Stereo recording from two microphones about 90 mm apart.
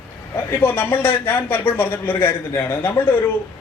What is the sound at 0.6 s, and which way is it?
A man's voice, 25° left (ahead or behind).